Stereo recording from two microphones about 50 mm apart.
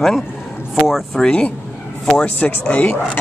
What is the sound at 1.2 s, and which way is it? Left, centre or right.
Speech, centre.